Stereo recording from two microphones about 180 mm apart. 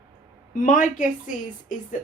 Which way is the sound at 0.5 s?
45° left (ahead or behind).